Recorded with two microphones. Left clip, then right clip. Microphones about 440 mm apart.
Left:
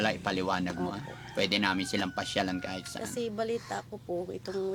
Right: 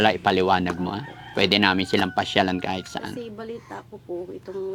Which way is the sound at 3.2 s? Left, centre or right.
Left.